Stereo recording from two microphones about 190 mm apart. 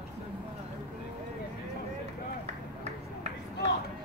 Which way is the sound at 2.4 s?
35° right (ahead or behind).